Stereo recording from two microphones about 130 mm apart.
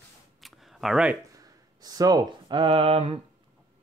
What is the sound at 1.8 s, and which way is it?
Speech, 30° right (ahead or behind).